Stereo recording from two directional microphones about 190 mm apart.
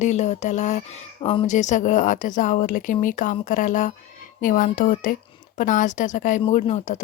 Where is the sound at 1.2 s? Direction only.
30° left (ahead or behind).